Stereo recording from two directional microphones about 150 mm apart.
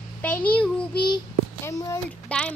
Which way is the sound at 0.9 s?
30° left (ahead or behind).